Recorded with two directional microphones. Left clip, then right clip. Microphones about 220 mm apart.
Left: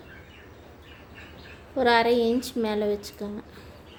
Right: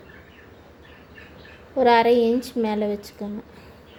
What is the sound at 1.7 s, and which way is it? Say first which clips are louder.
A woman's voice: right 4 dB; 10° right (ahead or behind).